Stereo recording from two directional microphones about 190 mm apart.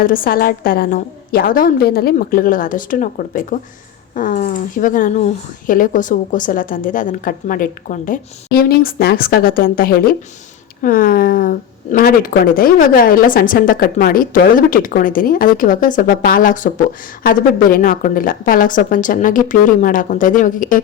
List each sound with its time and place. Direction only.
0.0 s speech: 50° left (ahead or behind)